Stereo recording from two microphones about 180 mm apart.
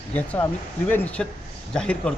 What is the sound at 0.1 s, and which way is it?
A man's voice, 10° left (ahead or behind).